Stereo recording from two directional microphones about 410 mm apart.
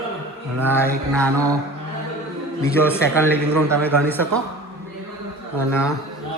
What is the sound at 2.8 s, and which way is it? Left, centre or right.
Speech, centre.